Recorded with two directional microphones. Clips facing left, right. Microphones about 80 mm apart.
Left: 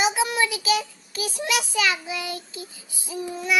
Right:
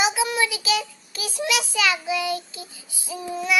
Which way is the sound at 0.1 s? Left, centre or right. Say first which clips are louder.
Even; left.